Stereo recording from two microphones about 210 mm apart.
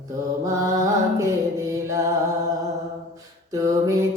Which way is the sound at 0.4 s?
15° right (ahead or behind).